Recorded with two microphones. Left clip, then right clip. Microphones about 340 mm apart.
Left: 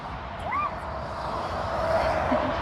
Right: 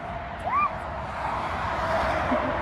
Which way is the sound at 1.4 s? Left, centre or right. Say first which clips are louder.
Left 2 dB; right.